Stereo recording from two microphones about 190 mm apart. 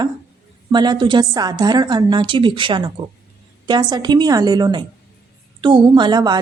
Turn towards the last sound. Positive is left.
turn(degrees=-20)  # may be behind; listen again after turning